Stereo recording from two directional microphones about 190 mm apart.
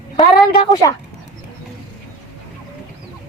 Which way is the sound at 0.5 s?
20° left (ahead or behind).